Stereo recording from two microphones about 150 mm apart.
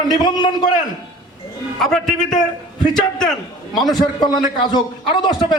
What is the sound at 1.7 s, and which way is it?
A man's voice, 5° left (ahead or behind).